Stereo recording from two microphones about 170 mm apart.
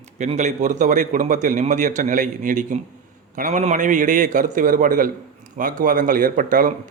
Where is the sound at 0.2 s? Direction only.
45° right (ahead or behind).